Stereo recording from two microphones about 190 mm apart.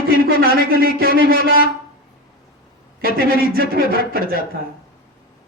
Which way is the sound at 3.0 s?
50° right (ahead or behind).